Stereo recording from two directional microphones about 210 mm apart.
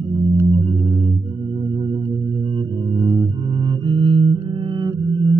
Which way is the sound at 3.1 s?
20° right (ahead or behind).